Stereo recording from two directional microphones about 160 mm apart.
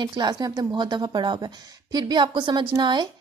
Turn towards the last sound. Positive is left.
turn(degrees=-30)  # may be behind; listen again after turning